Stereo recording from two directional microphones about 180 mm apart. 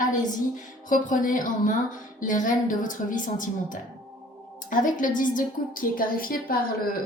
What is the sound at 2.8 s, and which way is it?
A woman's voice, 45° left (ahead or behind).